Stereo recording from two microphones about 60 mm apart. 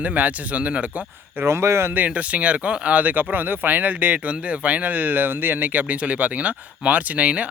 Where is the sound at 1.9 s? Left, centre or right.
Right.